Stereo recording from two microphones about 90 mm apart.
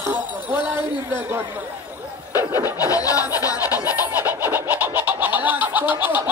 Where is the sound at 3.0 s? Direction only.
40° left (ahead or behind).